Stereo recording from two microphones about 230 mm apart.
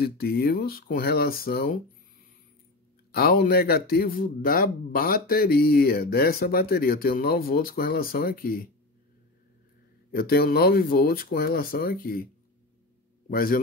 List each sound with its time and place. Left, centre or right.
0.0 s a man's voice: left
3.1 s a man's voice: left
10.1 s a man's voice: left
13.3 s a man's voice: left